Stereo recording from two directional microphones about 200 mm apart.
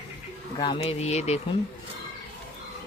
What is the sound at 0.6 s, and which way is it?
Speech, 25° left (ahead or behind).